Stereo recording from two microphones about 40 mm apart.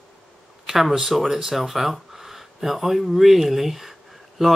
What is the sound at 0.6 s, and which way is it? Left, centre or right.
Speech, centre.